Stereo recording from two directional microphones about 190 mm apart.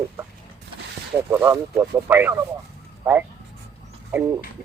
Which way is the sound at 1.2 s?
15° right (ahead or behind).